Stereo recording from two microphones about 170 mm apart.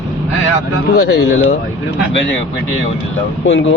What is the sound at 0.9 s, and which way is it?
Speech, 85° left.